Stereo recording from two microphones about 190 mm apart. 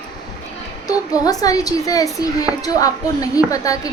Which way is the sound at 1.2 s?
20° left (ahead or behind).